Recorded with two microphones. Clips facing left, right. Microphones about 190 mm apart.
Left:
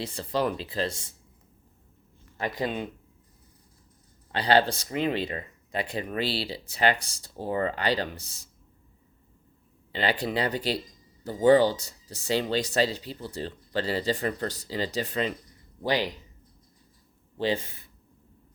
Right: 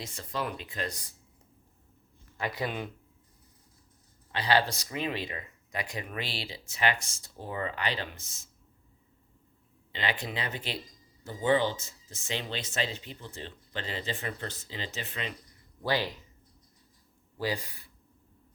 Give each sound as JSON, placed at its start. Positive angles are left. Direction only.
{"t": 0.0, "sound": "speech", "side_deg": 30}
{"t": 2.6, "sound": "speech", "side_deg": 25}
{"t": 4.3, "sound": "speech", "side_deg": 30}
{"t": 9.9, "sound": "speech", "side_deg": 35}
{"t": 15.8, "sound": "speech", "side_deg": 15}
{"t": 17.3, "sound": "speech", "side_deg": 25}